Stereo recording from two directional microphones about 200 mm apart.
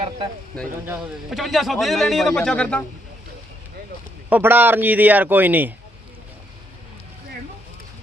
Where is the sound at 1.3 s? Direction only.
Centre (ahead or behind).